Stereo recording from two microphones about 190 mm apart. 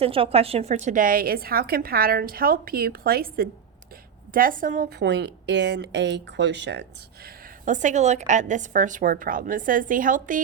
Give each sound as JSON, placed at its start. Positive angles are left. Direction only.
{"t": 0.0, "sound": "a woman's voice", "side_deg": -30}
{"t": 7.6, "sound": "a woman's voice", "side_deg": -40}